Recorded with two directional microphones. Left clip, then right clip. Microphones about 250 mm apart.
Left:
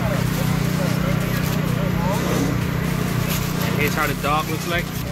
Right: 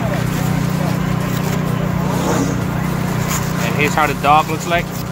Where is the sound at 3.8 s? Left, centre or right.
Right.